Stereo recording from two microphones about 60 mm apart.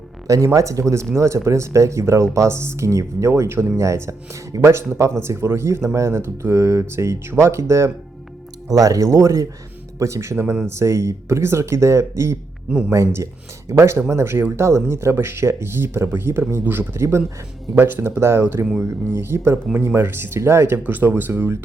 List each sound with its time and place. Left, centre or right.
0.3 s speech: right
8.7 s speech: right
10.0 s speech: right